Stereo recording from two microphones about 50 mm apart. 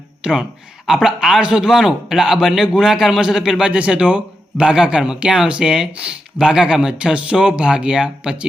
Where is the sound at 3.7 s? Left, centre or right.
Right.